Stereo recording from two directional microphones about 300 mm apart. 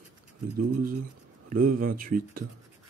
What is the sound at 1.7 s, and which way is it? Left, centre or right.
Speech, right.